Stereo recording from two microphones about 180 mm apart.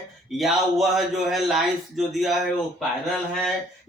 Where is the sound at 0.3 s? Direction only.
Centre (ahead or behind).